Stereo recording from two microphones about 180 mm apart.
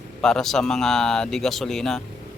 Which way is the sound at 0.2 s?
5° left (ahead or behind).